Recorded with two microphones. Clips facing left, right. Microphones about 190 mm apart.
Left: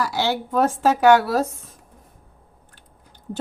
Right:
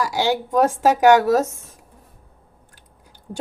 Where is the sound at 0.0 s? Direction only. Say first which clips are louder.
Right 2 dB; 15° right (ahead or behind).